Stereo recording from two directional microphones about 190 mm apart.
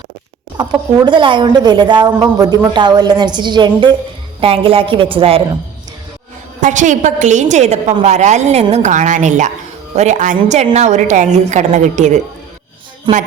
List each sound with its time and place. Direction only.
0.5 s speech: 20° right (ahead or behind)
6.6 s a woman's voice: 40° right (ahead or behind)